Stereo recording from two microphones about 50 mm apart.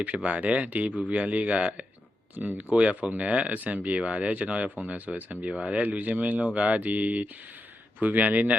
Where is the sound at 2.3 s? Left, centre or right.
Right.